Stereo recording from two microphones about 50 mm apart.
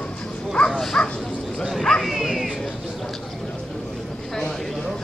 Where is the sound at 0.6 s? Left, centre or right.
Left.